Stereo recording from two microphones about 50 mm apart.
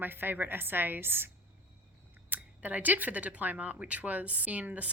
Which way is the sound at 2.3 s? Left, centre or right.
Right.